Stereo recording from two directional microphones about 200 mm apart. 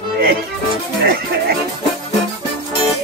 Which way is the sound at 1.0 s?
50° right (ahead or behind).